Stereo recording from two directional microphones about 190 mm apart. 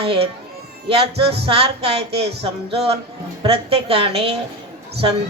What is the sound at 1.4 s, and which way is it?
Speech, 30° right (ahead or behind).